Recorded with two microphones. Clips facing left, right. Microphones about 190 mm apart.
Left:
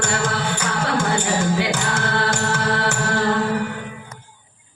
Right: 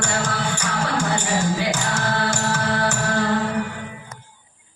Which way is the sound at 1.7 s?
55° left (ahead or behind).